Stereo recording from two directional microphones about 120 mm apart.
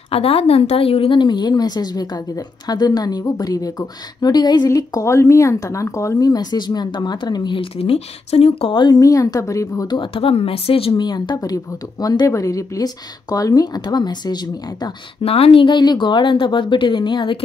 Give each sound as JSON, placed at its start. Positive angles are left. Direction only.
{"t": 0.1, "sound": "speech", "side_deg": 55}
{"t": 9.0, "sound": "speech", "side_deg": 30}
{"t": 15.2, "sound": "speech", "side_deg": 55}